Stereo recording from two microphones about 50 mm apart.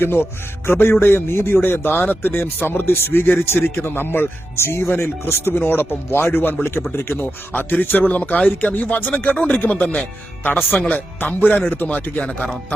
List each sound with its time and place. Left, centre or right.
0.0 s a man's voice: left
12.2 s speech: left